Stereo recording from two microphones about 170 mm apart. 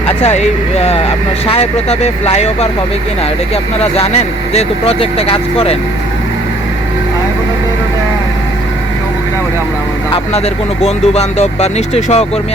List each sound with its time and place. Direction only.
0.2 s speech: 40° left (ahead or behind)
1.5 s speech: 35° left (ahead or behind)
4.5 s speech: 35° left (ahead or behind)
10.1 s speech: 35° left (ahead or behind)